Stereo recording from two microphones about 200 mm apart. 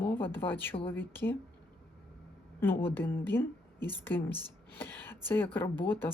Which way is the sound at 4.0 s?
10° left (ahead or behind).